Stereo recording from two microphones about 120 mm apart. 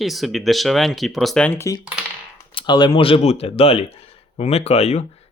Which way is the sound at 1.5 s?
20° left (ahead or behind).